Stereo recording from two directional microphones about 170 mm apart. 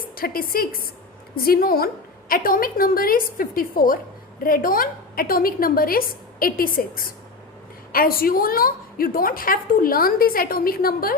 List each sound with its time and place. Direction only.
0.2 s a woman's voice: 60° left (ahead or behind)